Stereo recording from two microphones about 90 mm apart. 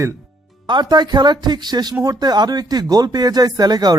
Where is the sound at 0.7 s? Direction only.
55° right (ahead or behind).